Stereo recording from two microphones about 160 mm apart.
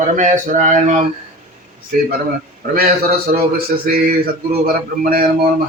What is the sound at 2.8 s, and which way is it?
A man's voice, 70° right (ahead or behind).